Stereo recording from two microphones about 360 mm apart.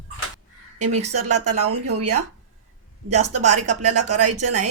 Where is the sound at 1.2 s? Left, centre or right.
Right.